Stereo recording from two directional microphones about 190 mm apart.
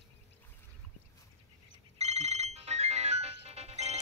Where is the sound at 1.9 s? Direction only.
35° right (ahead or behind).